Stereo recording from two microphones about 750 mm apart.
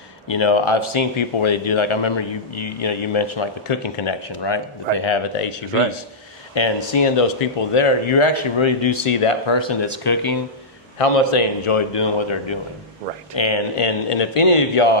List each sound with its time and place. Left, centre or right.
0.3 s speech: left
10.9 s speech: left